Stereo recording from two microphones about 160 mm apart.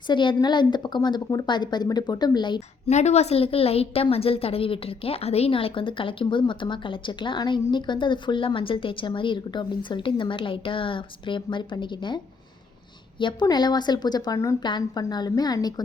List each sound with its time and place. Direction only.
0.1 s speech: 30° left (ahead or behind)
2.9 s a woman's voice: 45° left (ahead or behind); by 15.7 s 25° left (ahead or behind)